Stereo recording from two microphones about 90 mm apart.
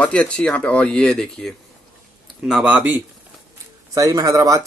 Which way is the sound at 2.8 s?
20° right (ahead or behind).